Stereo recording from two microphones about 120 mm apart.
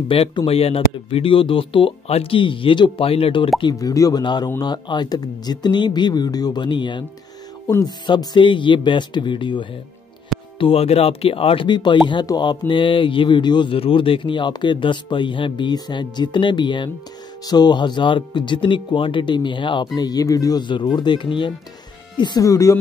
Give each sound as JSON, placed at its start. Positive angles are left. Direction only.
{"t": 0.1, "sound": "speech", "side_deg": 40}
{"t": 0.5, "sound": "speech", "side_deg": 55}
{"t": 3.5, "sound": "speech", "side_deg": 35}
{"t": 4.2, "sound": "speech", "side_deg": 40}
{"t": 10.6, "sound": "speech", "side_deg": 55}